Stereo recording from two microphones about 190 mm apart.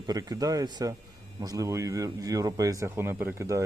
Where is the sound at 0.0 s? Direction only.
20° right (ahead or behind).